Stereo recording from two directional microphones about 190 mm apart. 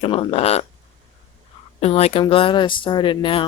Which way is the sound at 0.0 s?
30° left (ahead or behind).